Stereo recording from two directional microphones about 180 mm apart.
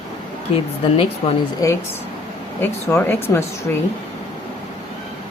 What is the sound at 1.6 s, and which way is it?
Speech, 20° left (ahead or behind).